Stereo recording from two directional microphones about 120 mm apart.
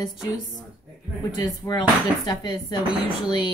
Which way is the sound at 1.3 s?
35° left (ahead or behind).